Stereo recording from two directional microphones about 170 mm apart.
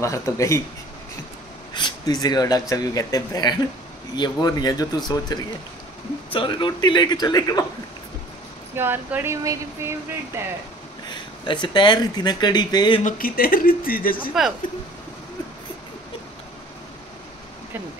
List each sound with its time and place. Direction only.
0.0 s speech: 15° left (ahead or behind)
1.7 s speech: 25° left (ahead or behind)
8.7 s speech: 10° right (ahead or behind)
11.1 s speech: 25° left (ahead or behind)
13.0 s speech: 60° left (ahead or behind)
14.3 s speech: centre (ahead or behind)